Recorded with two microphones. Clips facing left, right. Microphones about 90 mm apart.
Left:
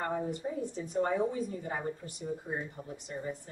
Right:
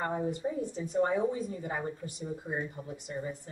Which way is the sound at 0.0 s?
20° right (ahead or behind).